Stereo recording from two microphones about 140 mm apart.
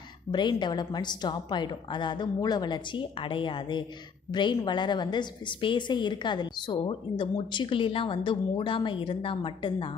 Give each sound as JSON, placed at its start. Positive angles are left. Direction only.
{"t": 0.3, "sound": "a woman's voice", "side_deg": 30}